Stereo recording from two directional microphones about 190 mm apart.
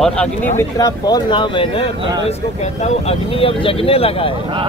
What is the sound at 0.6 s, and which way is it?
Speech, 20° left (ahead or behind).